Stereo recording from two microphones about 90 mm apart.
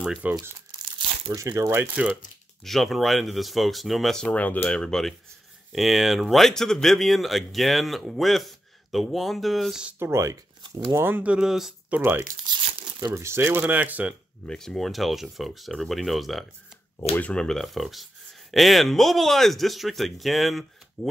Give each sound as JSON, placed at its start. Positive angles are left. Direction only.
{"t": 0.2, "sound": "speech", "side_deg": -15}
{"t": 1.3, "sound": "speech", "side_deg": -35}
{"t": 2.6, "sound": "speech", "side_deg": 0}
{"t": 4.3, "sound": "speech", "side_deg": 15}
{"t": 9.9, "sound": "speech", "side_deg": -30}
{"t": 11.0, "sound": "speech", "side_deg": -20}
{"t": 11.9, "sound": "speech", "side_deg": -25}
{"t": 14.5, "sound": "speech", "side_deg": 5}
{"t": 17.2, "sound": "speech", "side_deg": 10}